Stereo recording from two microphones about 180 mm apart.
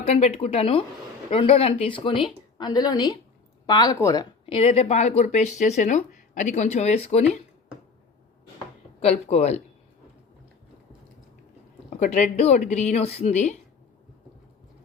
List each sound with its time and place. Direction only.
0.0 s a woman's voice: 35° left (ahead or behind)
9.0 s speech: 35° left (ahead or behind)
11.9 s speech: 40° left (ahead or behind)